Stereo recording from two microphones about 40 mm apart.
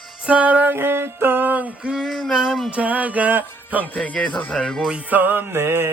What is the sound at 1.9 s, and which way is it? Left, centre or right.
Music, centre.